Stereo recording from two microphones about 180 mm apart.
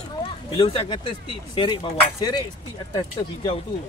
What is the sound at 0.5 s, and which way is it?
Speech, 30° left (ahead or behind).